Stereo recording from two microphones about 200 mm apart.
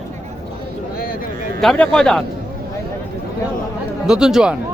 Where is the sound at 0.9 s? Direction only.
45° left (ahead or behind).